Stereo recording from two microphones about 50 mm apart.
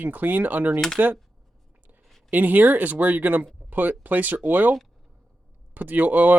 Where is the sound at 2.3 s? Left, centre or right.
Right.